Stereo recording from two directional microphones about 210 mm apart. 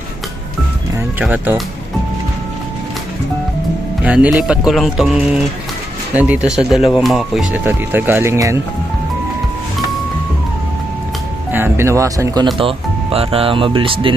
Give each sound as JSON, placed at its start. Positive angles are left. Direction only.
{"t": 1.2, "sound": "speech", "side_deg": -5}
{"t": 4.0, "sound": "speech", "side_deg": -5}
{"t": 11.5, "sound": "speech", "side_deg": -10}